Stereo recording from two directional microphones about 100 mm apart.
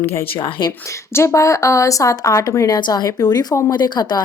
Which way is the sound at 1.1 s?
30° left (ahead or behind).